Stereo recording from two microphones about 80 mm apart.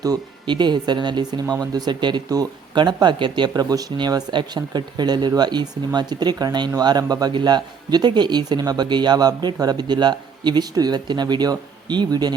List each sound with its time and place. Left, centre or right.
0.4 s speech: right
3.5 s speech: right
3.9 s speech: right